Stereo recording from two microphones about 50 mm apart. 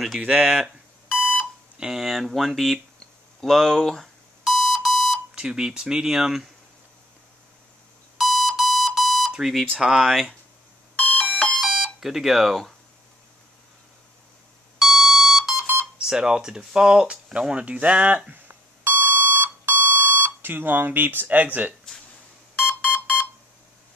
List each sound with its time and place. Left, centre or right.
0.3 s speech: centre
1.8 s speech: centre
2.0 s speech: centre
4.5 s alarm clock: centre
5.3 s speech: centre
8.2 s alarm clock: centre
9.8 s speech: centre
11.0 s alarm clock: left
11.5 s alarm clock: centre
14.8 s alarm clock: centre
15.6 s a sound: right
16.0 s a sound: centre; by 21.7 s right
22.6 s alarm: left